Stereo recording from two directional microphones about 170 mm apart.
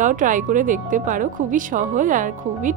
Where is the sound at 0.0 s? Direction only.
50° right (ahead or behind).